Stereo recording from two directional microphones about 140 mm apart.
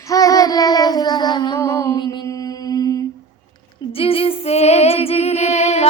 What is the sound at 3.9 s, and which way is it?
Music, 45° left (ahead or behind).